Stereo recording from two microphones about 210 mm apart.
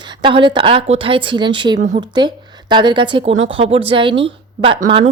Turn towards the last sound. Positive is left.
turn(degrees=-25)  # may be behind; listen again after turning